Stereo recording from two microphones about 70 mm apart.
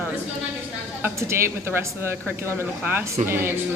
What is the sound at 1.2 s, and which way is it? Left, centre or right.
Speech, right.